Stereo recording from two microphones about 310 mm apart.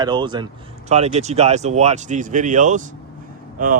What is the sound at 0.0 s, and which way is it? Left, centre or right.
Speech, centre.